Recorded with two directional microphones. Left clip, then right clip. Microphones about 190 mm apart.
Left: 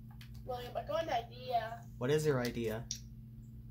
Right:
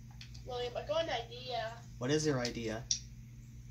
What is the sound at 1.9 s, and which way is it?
Speech, 55° left (ahead or behind).